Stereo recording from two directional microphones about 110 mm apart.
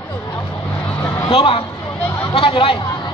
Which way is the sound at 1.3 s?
60° left (ahead or behind).